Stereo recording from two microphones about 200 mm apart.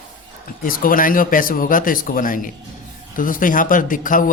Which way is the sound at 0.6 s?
45° left (ahead or behind).